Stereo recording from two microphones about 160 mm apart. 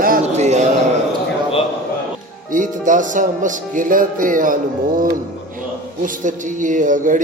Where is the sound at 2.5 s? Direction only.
55° right (ahead or behind).